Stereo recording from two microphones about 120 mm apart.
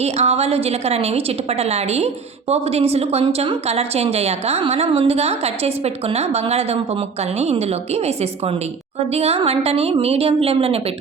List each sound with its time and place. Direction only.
0.0 s a woman's voice: 60° right (ahead or behind)